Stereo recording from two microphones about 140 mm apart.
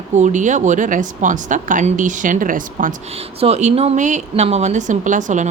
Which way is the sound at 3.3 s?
45° right (ahead or behind).